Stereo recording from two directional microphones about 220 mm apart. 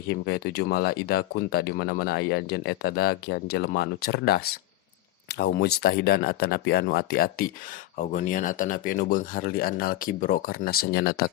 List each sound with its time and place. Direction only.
0.1 s speech: 50° left (ahead or behind)